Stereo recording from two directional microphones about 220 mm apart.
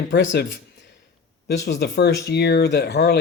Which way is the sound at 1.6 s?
50° left (ahead or behind).